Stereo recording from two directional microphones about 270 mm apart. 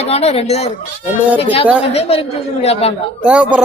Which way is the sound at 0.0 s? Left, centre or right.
Left.